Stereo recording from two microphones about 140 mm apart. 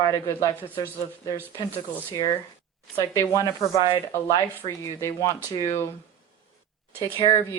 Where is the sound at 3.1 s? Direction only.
25° left (ahead or behind).